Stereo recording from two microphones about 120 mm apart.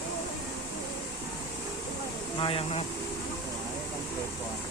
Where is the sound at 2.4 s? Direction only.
50° left (ahead or behind).